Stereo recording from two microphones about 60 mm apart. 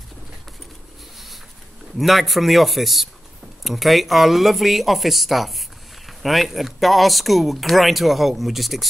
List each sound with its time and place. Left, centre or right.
2.0 s speech: centre